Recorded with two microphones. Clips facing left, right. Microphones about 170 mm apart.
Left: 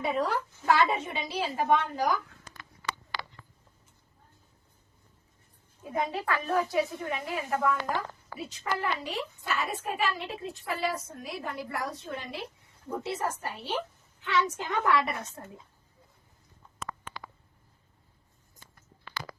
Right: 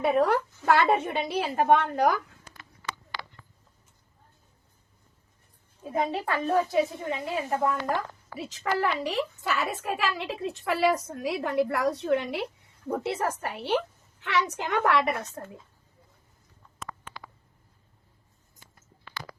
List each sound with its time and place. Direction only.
0.0 s a woman's voice: 60° right (ahead or behind)
5.8 s speech: 30° right (ahead or behind)
8.4 s a woman's voice: 85° right